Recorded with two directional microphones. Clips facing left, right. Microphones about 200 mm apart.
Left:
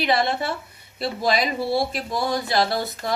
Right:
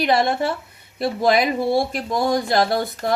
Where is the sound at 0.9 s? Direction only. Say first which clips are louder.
Right 5 dB; 50° right (ahead or behind).